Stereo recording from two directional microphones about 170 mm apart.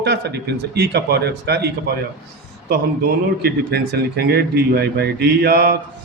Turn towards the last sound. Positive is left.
turn(degrees=-65)  # may be behind; listen again after turning